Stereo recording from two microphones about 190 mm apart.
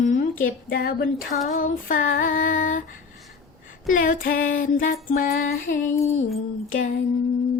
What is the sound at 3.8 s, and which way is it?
Speech, 45° left (ahead or behind).